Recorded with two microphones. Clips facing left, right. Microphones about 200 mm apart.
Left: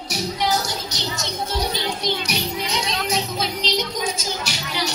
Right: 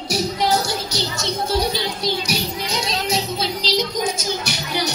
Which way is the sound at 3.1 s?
35° right (ahead or behind).